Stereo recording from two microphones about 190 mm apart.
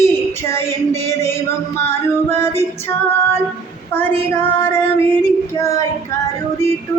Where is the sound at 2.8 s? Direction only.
15° left (ahead or behind).